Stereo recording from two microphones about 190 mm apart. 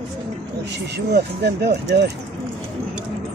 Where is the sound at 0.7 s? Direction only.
60° right (ahead or behind).